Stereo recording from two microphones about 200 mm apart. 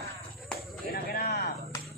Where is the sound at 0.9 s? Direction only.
50° left (ahead or behind).